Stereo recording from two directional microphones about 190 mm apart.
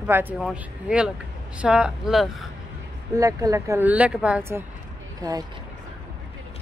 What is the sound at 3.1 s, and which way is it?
Speech, 15° right (ahead or behind).